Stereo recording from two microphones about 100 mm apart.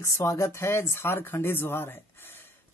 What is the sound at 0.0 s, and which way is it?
Speech, 30° left (ahead or behind).